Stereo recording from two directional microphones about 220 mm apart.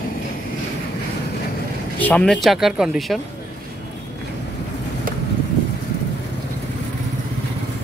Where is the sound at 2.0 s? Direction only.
5° left (ahead or behind).